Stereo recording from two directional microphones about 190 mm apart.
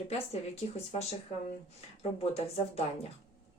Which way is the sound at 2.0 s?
30° left (ahead or behind).